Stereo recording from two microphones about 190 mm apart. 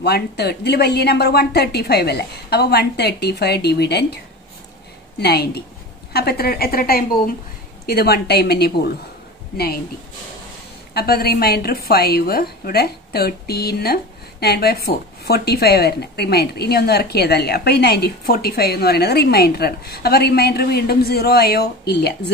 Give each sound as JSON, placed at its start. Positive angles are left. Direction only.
{"t": 0.0, "sound": "a woman's voice", "side_deg": 60}
{"t": 5.2, "sound": "a woman's voice", "side_deg": 55}
{"t": 10.9, "sound": "a woman's voice", "side_deg": 55}